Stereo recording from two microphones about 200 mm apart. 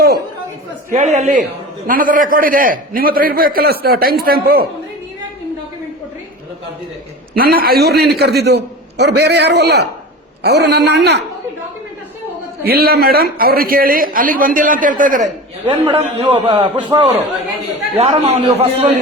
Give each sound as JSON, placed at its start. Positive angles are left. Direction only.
{"t": 0.9, "sound": "a man's voice", "side_deg": -35}
{"t": 7.3, "sound": "a man's voice", "side_deg": -50}
{"t": 12.6, "sound": "a man's voice", "side_deg": -50}
{"t": 15.9, "sound": "a man's voice", "side_deg": -25}